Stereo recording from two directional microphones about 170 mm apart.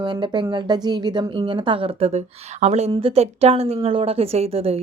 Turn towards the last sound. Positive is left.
turn(degrees=-35)  # may be behind; listen again after turning